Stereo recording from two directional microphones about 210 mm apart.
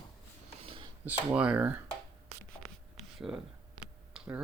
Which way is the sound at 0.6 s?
25° right (ahead or behind).